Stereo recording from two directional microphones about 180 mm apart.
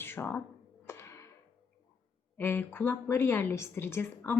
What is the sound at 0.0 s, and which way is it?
Speech, 15° left (ahead or behind).